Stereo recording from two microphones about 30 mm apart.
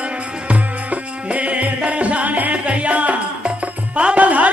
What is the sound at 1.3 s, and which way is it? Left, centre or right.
Music, right.